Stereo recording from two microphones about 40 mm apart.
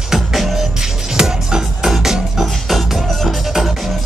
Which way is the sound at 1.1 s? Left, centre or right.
Centre.